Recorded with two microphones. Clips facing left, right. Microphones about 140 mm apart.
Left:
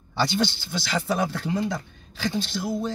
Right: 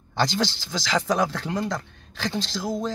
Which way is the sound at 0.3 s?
90° right.